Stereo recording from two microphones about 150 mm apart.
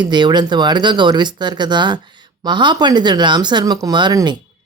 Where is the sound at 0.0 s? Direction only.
30° right (ahead or behind).